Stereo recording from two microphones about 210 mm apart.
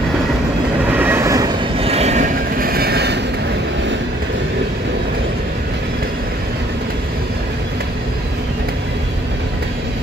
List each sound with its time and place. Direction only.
0.9 s train: 10° right (ahead or behind)
1.8 s vehicle: 30° right (ahead or behind)
2.6 s vehicle: 45° right (ahead or behind)